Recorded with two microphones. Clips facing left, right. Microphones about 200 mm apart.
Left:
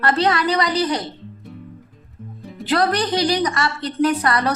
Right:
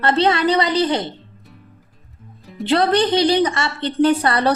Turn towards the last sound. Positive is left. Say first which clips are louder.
# right 3 dB
turn(degrees=-30)  # may be behind; listen again after turning